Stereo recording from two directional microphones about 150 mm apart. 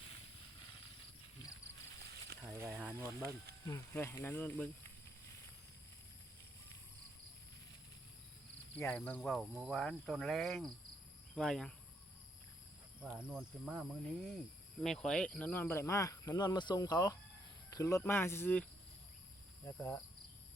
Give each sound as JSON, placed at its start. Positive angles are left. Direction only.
{"t": 2.5, "sound": "cricket", "side_deg": -15}
{"t": 3.7, "sound": "speech", "side_deg": 15}
{"t": 8.7, "sound": "speech", "side_deg": 10}
{"t": 13.0, "sound": "cricket", "side_deg": -10}
{"t": 14.8, "sound": "speech", "side_deg": 5}
{"t": 19.7, "sound": "speech", "side_deg": 20}